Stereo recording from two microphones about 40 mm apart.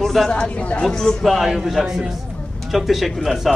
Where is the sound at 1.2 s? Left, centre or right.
Centre.